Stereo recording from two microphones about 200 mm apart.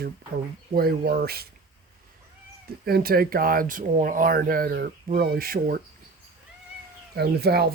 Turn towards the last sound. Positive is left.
turn(degrees=-55)  # may be behind; listen again after turning